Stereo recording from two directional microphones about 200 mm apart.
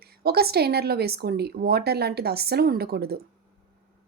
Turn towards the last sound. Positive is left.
turn(degrees=-50)  # may be behind; listen again after turning